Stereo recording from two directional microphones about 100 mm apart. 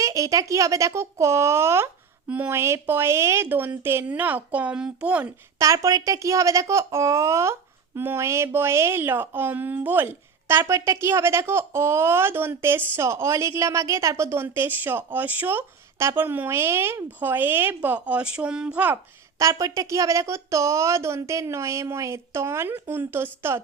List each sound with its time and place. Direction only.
0.0 s speech: 35° right (ahead or behind); by 5.3 s 15° right (ahead or behind)
5.5 s speech: 30° right (ahead or behind); by 18.9 s 15° right (ahead or behind)
19.4 s speech: 35° right (ahead or behind)